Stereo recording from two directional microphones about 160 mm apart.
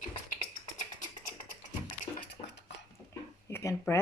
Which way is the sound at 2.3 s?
90° left.